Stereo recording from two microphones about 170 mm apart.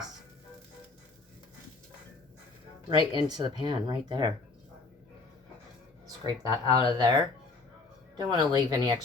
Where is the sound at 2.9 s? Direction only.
25° right (ahead or behind).